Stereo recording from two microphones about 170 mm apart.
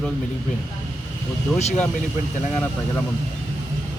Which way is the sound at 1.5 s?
40° left (ahead or behind).